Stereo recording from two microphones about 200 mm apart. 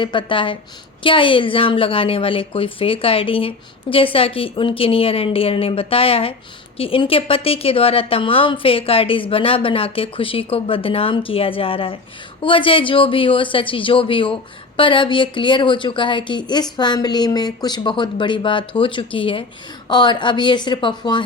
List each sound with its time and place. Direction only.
0.0 s a woman's voice: 25° left (ahead or behind)